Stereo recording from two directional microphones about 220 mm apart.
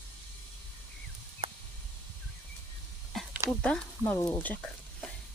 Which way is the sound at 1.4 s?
25° right (ahead or behind).